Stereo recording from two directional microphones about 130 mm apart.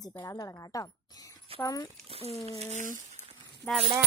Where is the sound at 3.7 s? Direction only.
10° left (ahead or behind).